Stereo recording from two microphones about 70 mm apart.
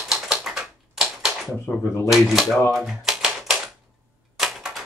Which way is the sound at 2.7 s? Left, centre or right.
Centre.